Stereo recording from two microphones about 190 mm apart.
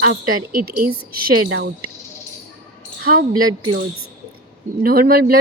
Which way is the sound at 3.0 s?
50° right (ahead or behind).